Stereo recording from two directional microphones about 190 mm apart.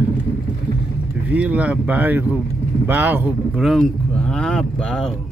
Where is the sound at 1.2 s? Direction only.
5° right (ahead or behind).